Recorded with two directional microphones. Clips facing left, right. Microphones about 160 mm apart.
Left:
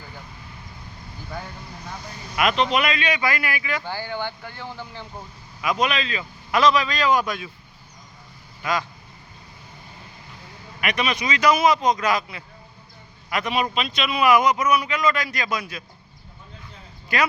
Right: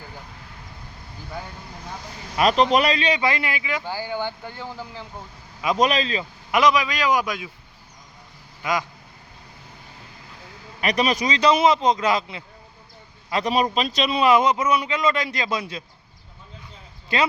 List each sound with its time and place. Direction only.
2.3 s a man's voice: 35° right (ahead or behind); by 5.0 s 10° right (ahead or behind)
5.6 s a man's voice: 40° right (ahead or behind)
6.5 s a man's voice: 15° right (ahead or behind)
10.8 s speech: 35° right (ahead or behind)
13.3 s a man's voice: 35° right (ahead or behind)
17.1 s speech: 25° right (ahead or behind)